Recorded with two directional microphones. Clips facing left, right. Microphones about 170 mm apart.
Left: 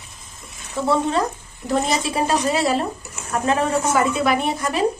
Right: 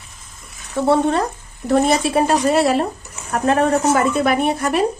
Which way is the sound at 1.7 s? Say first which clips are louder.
Right 5 dB; 60° right (ahead or behind).